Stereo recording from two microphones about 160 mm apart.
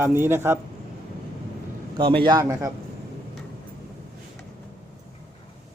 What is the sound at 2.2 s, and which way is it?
Speech, 20° right (ahead or behind).